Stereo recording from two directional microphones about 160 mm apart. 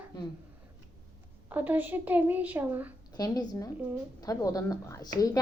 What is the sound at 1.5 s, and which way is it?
A woman's voice, 10° right (ahead or behind).